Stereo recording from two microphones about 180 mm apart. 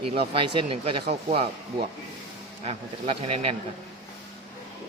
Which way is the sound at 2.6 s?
35° right (ahead or behind).